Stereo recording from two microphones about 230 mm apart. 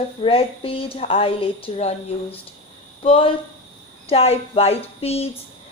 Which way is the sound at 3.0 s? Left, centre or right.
Left.